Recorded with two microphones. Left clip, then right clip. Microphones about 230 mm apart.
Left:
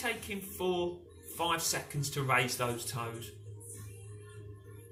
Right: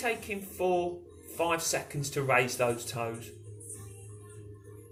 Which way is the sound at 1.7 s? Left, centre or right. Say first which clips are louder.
Right 3 dB; left.